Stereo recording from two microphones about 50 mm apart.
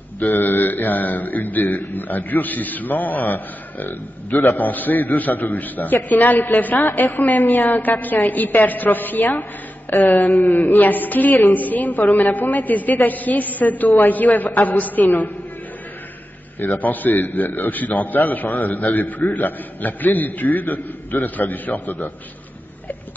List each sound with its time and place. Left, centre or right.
0.2 s mantra: left
16.7 s mantra: left